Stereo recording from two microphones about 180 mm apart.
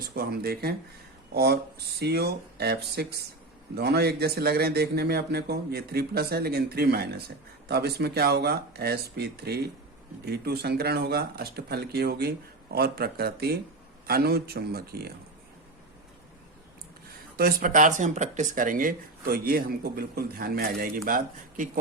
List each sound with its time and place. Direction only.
0.0 s a man's voice: 55° right (ahead or behind)
17.3 s speech: 50° right (ahead or behind)